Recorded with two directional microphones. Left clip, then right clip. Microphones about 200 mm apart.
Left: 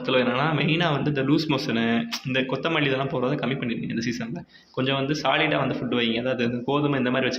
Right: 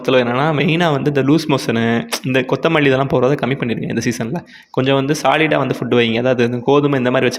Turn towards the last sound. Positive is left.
turn(degrees=-50)  # may be behind; listen again after turning